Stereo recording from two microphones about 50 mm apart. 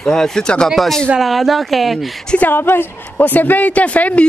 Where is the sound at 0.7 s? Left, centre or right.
Centre.